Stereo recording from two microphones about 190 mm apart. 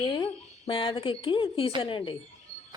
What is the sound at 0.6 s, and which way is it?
Speech, 25° left (ahead or behind).